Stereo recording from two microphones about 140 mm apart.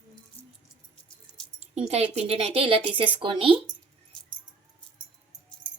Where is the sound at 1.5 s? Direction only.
50° right (ahead or behind).